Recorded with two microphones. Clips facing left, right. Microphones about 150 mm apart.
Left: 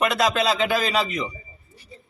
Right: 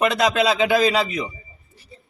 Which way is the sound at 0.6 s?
15° right (ahead or behind).